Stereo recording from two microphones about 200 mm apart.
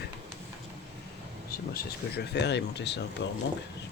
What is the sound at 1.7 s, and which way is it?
Speech, 55° left (ahead or behind).